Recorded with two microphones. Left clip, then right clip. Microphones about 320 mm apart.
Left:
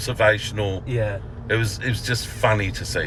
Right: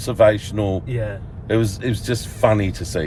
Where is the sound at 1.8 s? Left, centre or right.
Centre.